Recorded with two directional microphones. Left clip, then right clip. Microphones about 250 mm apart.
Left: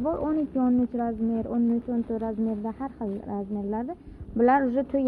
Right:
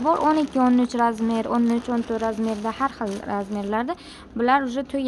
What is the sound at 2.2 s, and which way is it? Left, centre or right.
Speech, centre.